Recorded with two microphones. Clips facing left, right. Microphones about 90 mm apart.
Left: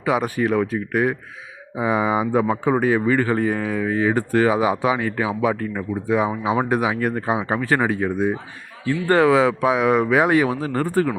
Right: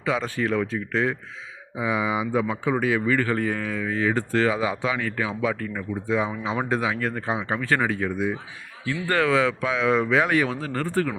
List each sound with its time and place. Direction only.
0.0 s speech: 15° left (ahead or behind)
1.7 s speech: 45° left (ahead or behind); by 11.1 s 20° left (ahead or behind)